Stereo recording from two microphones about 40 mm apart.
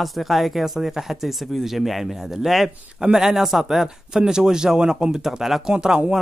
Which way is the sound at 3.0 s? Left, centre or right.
Centre.